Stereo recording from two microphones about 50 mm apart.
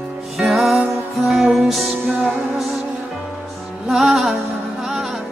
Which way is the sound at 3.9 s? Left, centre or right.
Centre.